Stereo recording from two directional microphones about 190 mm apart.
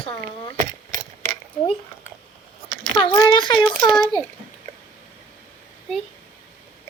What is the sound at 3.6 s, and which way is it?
Speech, 5° left (ahead or behind).